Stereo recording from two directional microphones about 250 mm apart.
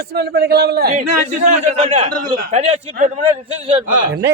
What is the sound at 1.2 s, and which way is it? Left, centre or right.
A man's voice, right.